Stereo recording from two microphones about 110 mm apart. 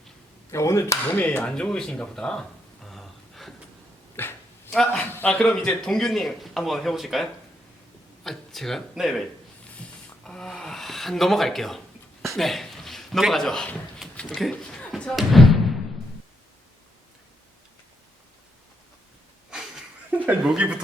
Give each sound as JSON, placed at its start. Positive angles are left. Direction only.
{"t": 0.5, "sound": "speech", "side_deg": 25}
{"t": 1.4, "sound": "speech", "side_deg": 10}
{"t": 2.8, "sound": "a sound", "side_deg": 0}
{"t": 4.2, "sound": "dog", "side_deg": 20}
{"t": 4.7, "sound": "a man's voice", "side_deg": 5}
{"t": 9.7, "sound": "a sound", "side_deg": 10}
{"t": 12.3, "sound": "speech", "side_deg": 0}
{"t": 14.5, "sound": "slam", "side_deg": 10}
{"t": 19.5, "sound": "a sound", "side_deg": -5}
{"t": 20.4, "sound": "speech", "side_deg": -5}